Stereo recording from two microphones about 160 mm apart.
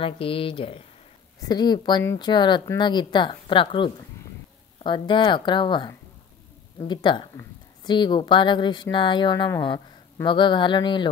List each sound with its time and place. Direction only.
0.0 s a woman's voice: 35° left (ahead or behind)